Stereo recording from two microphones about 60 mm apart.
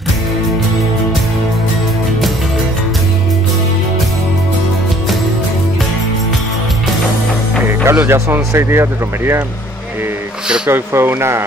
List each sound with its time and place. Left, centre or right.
7.6 s music: right
8.1 s speech: right
10.7 s speech: right